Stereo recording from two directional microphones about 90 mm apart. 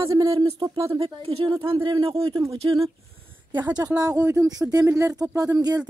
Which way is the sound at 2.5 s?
45° right (ahead or behind).